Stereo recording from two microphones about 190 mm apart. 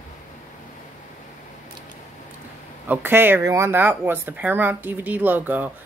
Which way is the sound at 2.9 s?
10° right (ahead or behind).